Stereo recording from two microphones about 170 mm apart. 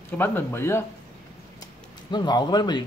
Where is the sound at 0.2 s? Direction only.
15° left (ahead or behind).